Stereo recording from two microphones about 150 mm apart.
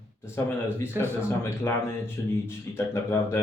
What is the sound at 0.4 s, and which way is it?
Speech, 15° left (ahead or behind).